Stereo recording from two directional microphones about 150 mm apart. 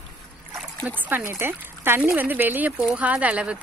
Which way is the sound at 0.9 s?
15° right (ahead or behind).